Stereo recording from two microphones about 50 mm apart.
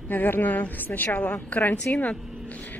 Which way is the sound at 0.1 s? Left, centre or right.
Left.